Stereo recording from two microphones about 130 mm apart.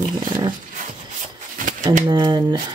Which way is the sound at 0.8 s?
80° right.